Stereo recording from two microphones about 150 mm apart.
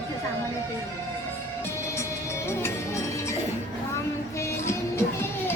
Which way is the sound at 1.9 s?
20° left (ahead or behind).